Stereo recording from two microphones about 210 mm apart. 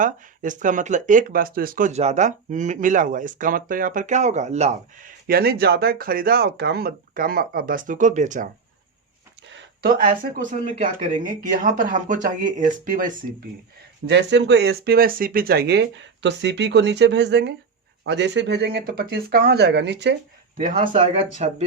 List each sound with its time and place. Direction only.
0.0 s speech: 40° right (ahead or behind)
9.5 s a sound: 60° right (ahead or behind)
9.9 s speech: 40° right (ahead or behind)
14.1 s speech: 55° right (ahead or behind)
20.7 s speech: 25° right (ahead or behind)